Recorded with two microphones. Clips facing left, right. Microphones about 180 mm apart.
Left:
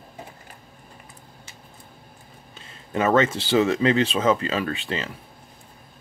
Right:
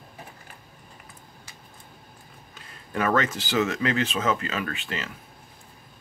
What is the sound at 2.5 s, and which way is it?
Speech, 25° left (ahead or behind).